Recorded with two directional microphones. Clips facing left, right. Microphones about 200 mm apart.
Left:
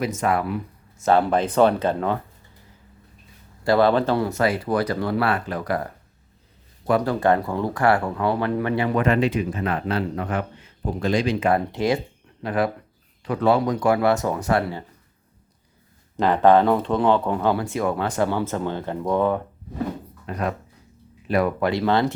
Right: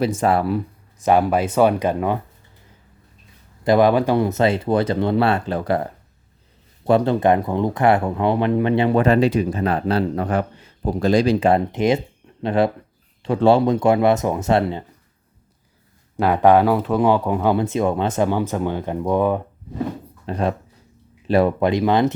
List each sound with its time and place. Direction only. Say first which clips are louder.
0.0 s speech: right 4 dB; 30° right (ahead or behind)
0.9 s speech: right 2 dB; 15° right (ahead or behind)
3.6 s speech: right 3 dB; 15° right (ahead or behind)
16.1 s speech: right 2 dB; 10° right (ahead or behind)
20.2 s speech: right 4 dB; 30° right (ahead or behind)